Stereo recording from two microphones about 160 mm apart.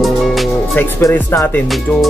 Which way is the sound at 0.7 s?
15° left (ahead or behind).